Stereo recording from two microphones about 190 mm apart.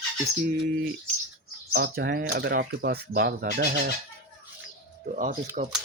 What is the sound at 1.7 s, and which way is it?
Speech, 55° right (ahead or behind).